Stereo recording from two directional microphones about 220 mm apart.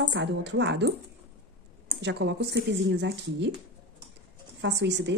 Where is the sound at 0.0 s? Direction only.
55° right (ahead or behind).